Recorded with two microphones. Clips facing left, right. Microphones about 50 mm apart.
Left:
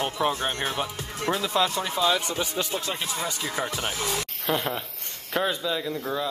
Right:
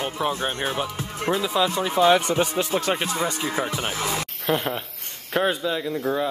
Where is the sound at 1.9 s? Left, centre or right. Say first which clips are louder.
Right 9 dB; right.